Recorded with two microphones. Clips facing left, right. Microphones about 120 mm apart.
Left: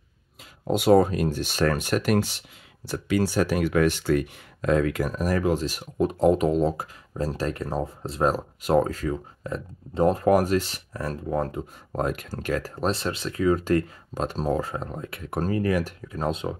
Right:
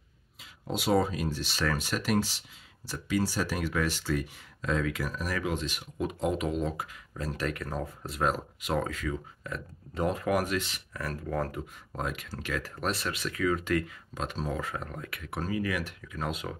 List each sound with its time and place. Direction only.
0.7 s speech: 50° left (ahead or behind); by 11.6 s 20° left (ahead or behind)
11.9 s speech: 45° left (ahead or behind)
12.7 s speech: 30° left (ahead or behind)